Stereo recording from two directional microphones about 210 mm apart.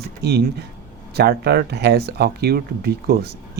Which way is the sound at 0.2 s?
50° right (ahead or behind).